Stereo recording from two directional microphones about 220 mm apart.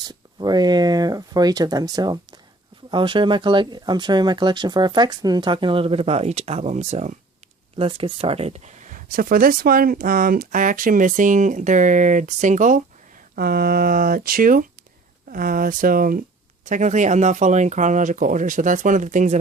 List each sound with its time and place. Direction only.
0.1 s speech: 20° right (ahead or behind)